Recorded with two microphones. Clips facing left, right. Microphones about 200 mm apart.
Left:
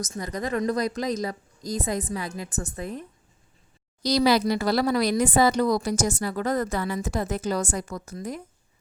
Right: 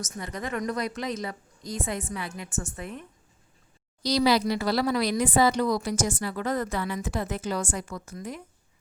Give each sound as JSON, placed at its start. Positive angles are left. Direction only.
{"t": 0.0, "sound": "speech", "side_deg": 40}
{"t": 4.0, "sound": "speech", "side_deg": 45}